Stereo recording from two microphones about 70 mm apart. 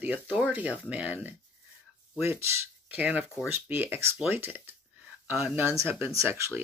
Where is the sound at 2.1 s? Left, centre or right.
Right.